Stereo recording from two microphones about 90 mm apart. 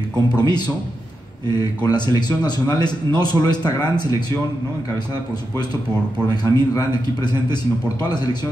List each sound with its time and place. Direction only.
0.4 s speech: 55° left (ahead or behind)
6.3 s speech: 40° left (ahead or behind)